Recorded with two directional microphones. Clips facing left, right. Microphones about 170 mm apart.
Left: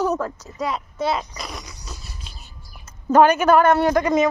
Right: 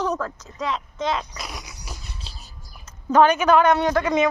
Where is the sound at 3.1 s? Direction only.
10° left (ahead or behind).